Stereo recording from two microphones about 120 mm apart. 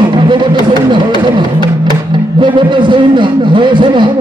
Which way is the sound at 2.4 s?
40° right (ahead or behind).